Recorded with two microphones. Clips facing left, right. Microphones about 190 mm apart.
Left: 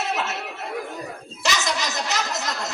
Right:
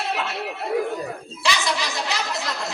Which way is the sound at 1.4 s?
45° left (ahead or behind).